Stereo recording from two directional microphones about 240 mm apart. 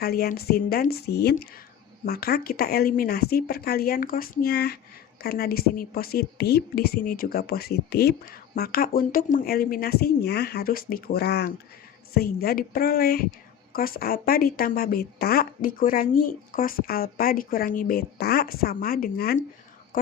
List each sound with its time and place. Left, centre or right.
0.0 s speech: left